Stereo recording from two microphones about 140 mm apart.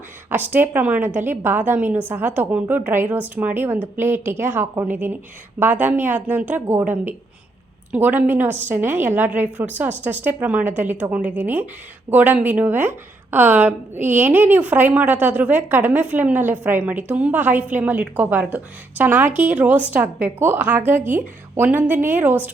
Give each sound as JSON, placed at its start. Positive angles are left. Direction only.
{"t": 0.3, "sound": "a woman's voice", "side_deg": -15}